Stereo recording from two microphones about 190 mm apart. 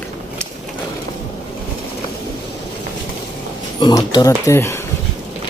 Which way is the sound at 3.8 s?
20° left (ahead or behind).